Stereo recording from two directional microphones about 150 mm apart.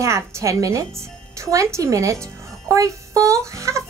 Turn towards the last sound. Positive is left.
turn(degrees=-20)  # may be behind; listen again after turning